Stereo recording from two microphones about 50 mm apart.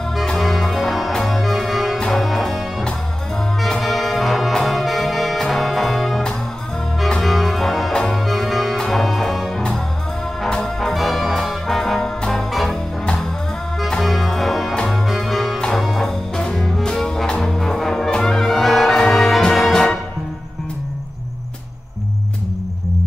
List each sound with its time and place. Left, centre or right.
0.4 s music: centre
3.6 s brass instrument: centre
4.6 s music: centre
8.2 s music: centre
10.6 s brass instrument: centre
12.2 s music: centre
12.4 s music: centre
13.0 s music: centre
14.0 s music: centre